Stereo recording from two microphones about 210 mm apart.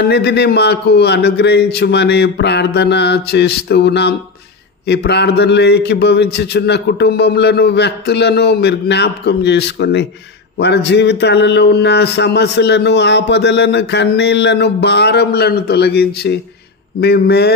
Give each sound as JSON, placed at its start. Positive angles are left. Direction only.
{"t": 0.0, "sound": "a man's voice", "side_deg": 50}